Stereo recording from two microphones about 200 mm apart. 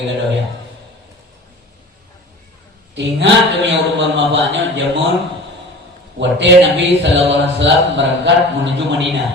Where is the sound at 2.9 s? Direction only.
65° right (ahead or behind).